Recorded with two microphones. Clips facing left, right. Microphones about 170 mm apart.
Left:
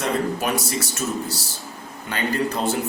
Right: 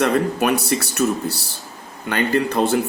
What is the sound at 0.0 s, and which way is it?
Speech, 65° right (ahead or behind).